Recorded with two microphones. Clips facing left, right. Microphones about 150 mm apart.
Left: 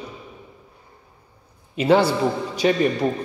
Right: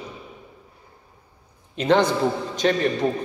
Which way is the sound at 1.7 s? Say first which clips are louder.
Left 2 dB; 10° left (ahead or behind).